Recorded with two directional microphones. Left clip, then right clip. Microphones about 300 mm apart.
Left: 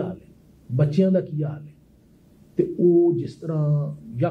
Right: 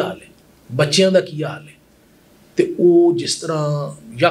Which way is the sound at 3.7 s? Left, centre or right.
Centre.